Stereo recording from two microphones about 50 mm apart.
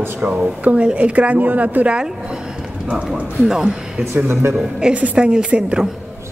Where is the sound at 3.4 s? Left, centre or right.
Centre.